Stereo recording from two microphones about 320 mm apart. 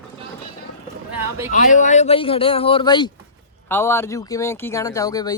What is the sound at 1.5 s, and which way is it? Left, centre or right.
Speech, left.